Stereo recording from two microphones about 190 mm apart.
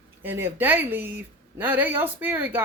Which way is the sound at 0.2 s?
10° right (ahead or behind).